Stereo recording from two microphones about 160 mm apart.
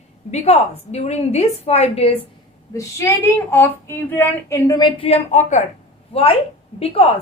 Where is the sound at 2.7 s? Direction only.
15° left (ahead or behind); by 5.6 s 50° left (ahead or behind).